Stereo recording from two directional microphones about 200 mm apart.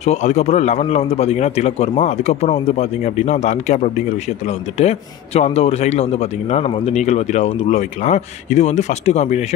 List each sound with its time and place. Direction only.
0.0 s a man's voice: 35° left (ahead or behind)